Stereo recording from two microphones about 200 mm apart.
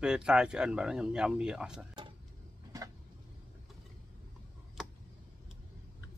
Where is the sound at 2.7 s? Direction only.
20° right (ahead or behind).